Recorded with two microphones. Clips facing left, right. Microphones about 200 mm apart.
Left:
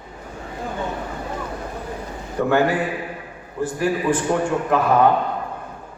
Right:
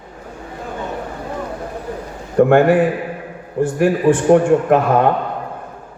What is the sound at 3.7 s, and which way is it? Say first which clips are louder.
A man's voice: right 6 dB; 50° right (ahead or behind).